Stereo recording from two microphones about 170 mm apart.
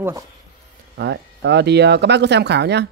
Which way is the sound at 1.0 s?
85° right.